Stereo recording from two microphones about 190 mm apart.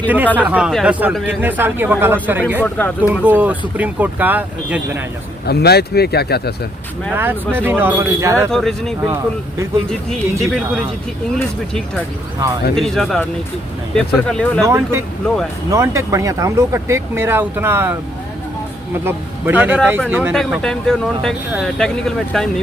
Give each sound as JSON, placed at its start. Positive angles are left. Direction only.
{"t": 0.3, "sound": "speech", "side_deg": -10}
{"t": 2.6, "sound": "speech", "side_deg": 10}
{"t": 3.0, "sound": "speech", "side_deg": -10}
{"t": 5.5, "sound": "speech", "side_deg": 60}
{"t": 7.2, "sound": "speech", "side_deg": -10}
{"t": 8.4, "sound": "speech", "side_deg": 0}
{"t": 10.4, "sound": "speech", "side_deg": 0}
{"t": 14.6, "sound": "speech", "side_deg": -15}
{"t": 19.0, "sound": "speech", "side_deg": -10}
{"t": 20.3, "sound": "speech", "side_deg": 0}